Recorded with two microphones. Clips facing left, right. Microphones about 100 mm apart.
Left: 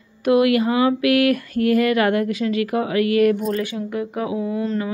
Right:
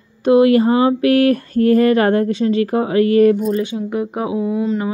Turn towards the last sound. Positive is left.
turn(degrees=-15)  # may be behind; listen again after turning